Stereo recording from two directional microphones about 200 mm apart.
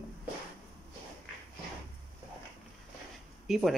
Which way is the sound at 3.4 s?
Centre (ahead or behind).